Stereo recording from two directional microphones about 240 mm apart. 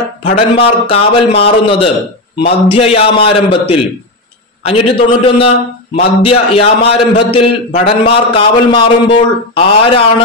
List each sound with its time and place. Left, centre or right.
0.2 s a man's voice: left